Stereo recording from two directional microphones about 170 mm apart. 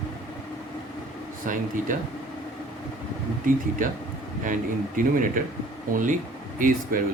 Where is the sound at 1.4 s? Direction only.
50° right (ahead or behind).